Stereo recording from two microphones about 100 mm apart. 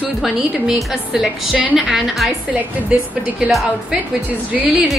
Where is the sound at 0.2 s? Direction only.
5° right (ahead or behind).